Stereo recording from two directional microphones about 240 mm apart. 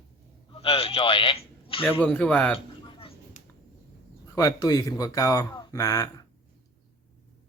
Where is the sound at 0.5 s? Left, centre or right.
Left.